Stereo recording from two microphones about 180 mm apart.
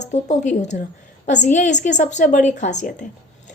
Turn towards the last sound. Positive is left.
turn(degrees=45)  # may be behind; listen again after turning